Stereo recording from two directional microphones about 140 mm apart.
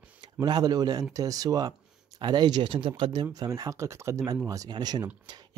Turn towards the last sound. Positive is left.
turn(degrees=-30)  # may be behind; listen again after turning